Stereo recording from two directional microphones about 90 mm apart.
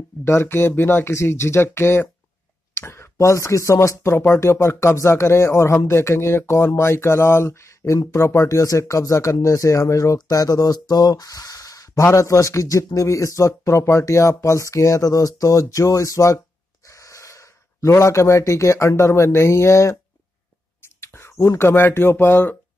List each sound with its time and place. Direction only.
0.2 s speech: 25° left (ahead or behind)
21.0 s speech: 25° left (ahead or behind)